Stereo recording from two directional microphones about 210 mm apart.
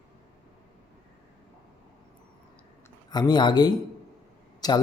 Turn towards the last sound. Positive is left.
turn(degrees=20)  # may be behind; listen again after turning